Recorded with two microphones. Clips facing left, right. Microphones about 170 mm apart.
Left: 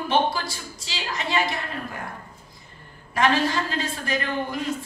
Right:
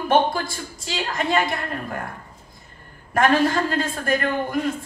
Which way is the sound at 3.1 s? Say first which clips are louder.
Right 4 dB; 50° right (ahead or behind).